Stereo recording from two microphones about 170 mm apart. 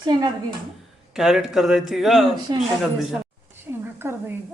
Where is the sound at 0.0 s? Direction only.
25° right (ahead or behind).